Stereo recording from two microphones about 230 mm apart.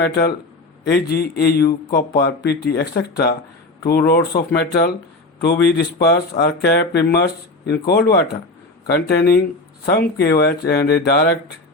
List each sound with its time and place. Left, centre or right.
0.0 s speech: left